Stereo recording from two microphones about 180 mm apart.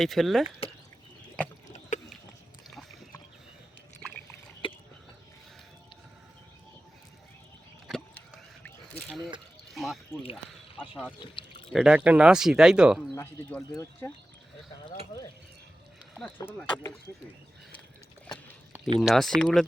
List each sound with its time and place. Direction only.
0.0 s speech: centre (ahead or behind)
1.6 s a sound: 40° left (ahead or behind)
2.6 s boat: centre (ahead or behind)
4.6 s a sound: 30° left (ahead or behind)
7.9 s a sound: centre (ahead or behind)
9.7 s speech: centre (ahead or behind)
10.8 s speech: 10° left (ahead or behind)
11.2 s pour: 30° left (ahead or behind)
11.7 s speech: 5° right (ahead or behind)
13.1 s speech: 15° left (ahead or behind)
16.7 s speech: 5° left (ahead or behind)
18.9 s speech: centre (ahead or behind)